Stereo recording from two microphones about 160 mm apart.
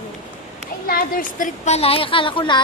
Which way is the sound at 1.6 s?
40° left (ahead or behind).